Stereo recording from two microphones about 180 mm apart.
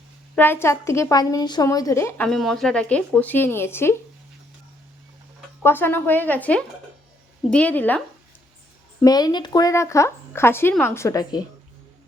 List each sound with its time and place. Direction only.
0.3 s speech: 10° left (ahead or behind)
2.2 s speech: centre (ahead or behind)
5.6 s speech: 10° left (ahead or behind)
9.0 s speech: 20° left (ahead or behind)